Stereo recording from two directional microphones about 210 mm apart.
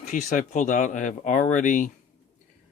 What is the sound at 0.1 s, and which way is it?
Speech, 35° left (ahead or behind).